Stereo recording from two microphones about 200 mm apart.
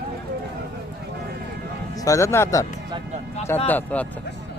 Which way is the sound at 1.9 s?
15° left (ahead or behind).